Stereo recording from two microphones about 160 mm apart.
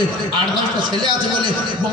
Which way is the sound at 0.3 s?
30° right (ahead or behind).